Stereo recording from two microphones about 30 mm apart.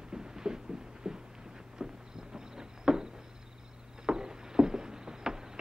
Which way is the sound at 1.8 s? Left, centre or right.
Right.